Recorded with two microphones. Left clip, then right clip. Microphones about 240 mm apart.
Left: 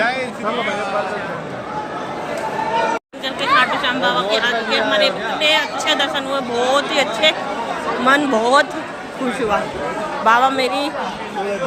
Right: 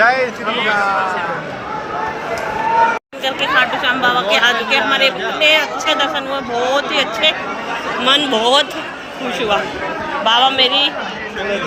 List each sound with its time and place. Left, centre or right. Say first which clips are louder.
0.0 s a sound: right 6 dB; centre
3.2 s a man's voice: right 1 dB; centre
10.2 s a man's voice: right 2 dB; left